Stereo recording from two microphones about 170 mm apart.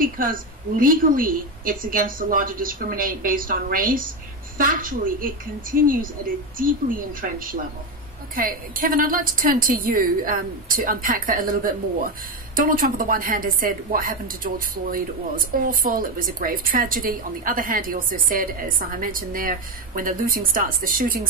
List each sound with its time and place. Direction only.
0.0 s a woman's voice: 55° right (ahead or behind)